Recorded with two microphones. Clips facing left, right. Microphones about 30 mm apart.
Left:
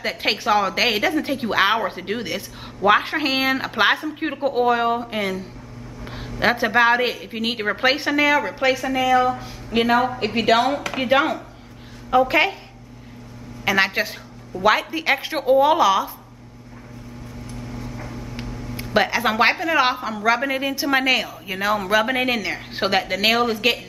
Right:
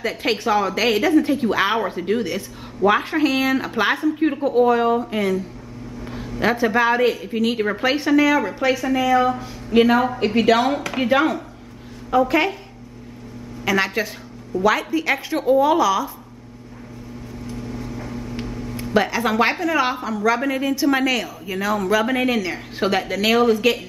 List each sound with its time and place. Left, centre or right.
0.0 s a woman's voice: centre
3.9 s a woman's voice: centre
4.2 s speech: left
6.0 s a sound: centre
6.4 s speech: centre
8.6 s a woman's voice: centre
13.7 s speech: centre
17.5 s vehicle: centre
18.9 s a woman's voice: centre